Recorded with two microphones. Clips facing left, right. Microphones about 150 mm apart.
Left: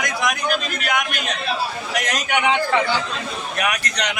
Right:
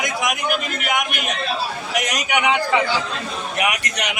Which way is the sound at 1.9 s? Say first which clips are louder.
Right 1 dB; 20° right (ahead or behind).